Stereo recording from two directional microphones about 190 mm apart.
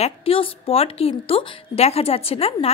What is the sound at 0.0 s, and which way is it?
A woman's voice, 30° left (ahead or behind).